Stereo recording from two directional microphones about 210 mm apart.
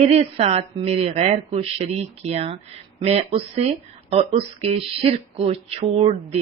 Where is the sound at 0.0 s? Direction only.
30° right (ahead or behind).